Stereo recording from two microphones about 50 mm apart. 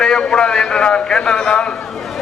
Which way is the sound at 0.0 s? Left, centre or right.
Centre.